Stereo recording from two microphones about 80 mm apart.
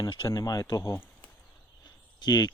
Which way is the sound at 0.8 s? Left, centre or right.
Left.